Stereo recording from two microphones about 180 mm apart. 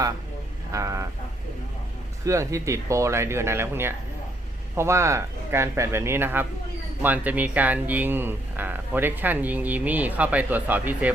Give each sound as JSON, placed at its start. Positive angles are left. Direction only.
{"t": 0.7, "sound": "speech", "side_deg": -15}
{"t": 2.2, "sound": "speech", "side_deg": -15}